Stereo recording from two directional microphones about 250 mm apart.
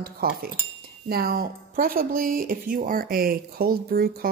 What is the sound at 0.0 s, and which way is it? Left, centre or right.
Speech, right.